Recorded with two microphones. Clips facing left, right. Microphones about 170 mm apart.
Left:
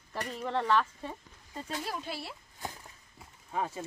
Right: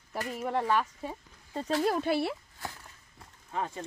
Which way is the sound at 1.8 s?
55° right (ahead or behind).